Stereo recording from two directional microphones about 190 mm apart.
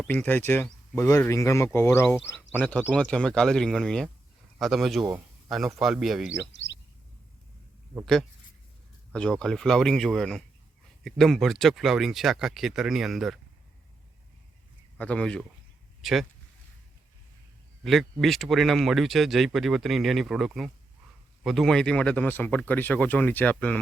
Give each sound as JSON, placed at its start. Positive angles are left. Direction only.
{"t": 0.1, "sound": "speech", "side_deg": 10}
{"t": 6.5, "sound": "speech", "side_deg": 70}
{"t": 9.1, "sound": "speech", "side_deg": 5}
{"t": 14.9, "sound": "speech", "side_deg": 5}
{"t": 17.8, "sound": "speech", "side_deg": 0}